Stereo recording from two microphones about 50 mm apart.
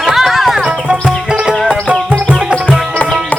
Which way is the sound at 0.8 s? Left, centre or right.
Centre.